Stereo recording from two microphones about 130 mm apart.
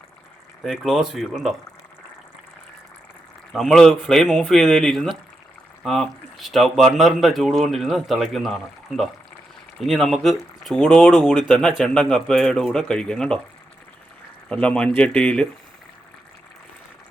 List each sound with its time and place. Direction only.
0.6 s speech: centre (ahead or behind)
3.5 s speech: centre (ahead or behind)
14.5 s speech: 5° left (ahead or behind)